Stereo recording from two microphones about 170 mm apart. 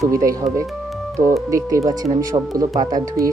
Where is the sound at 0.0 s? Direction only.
20° right (ahead or behind).